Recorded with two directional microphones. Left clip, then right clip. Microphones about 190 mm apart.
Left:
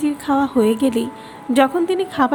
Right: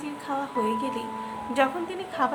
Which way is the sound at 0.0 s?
35° left (ahead or behind).